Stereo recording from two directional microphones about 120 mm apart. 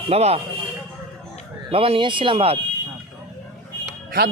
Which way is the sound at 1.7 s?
50° right (ahead or behind).